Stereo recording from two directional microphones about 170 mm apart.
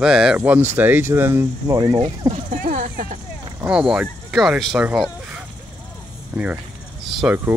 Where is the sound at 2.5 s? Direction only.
50° right (ahead or behind).